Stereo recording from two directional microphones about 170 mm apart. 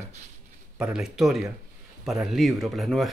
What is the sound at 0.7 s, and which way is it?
Speech, 5° right (ahead or behind).